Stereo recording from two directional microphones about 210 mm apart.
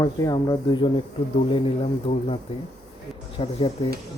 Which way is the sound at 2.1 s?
25° left (ahead or behind).